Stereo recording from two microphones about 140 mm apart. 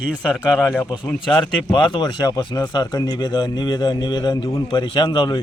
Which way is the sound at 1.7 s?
35° left (ahead or behind).